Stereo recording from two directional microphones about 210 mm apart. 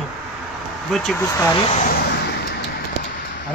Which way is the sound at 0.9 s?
Centre (ahead or behind).